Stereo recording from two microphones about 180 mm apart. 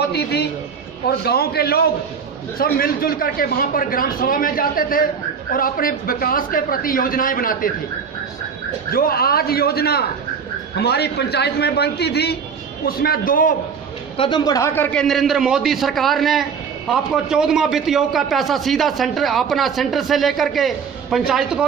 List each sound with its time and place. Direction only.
0.1 s a man's voice: 65° left (ahead or behind)
8.9 s a man's voice: 55° left (ahead or behind)
14.1 s a man's voice: 25° left (ahead or behind); by 21.6 s 5° right (ahead or behind)